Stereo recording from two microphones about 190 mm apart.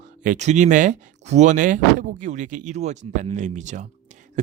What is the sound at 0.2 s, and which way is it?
Speech, 40° right (ahead or behind).